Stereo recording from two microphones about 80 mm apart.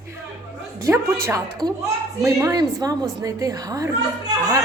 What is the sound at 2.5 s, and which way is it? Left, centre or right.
A woman's voice, right.